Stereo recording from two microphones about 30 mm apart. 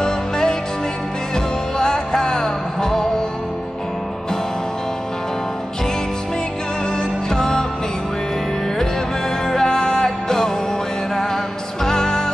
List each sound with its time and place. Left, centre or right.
0.0 s music: left
7.0 s music: left
9.5 s music: left
11.8 s music: left